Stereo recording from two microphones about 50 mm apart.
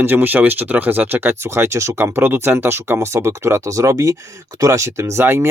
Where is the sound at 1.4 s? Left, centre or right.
Right.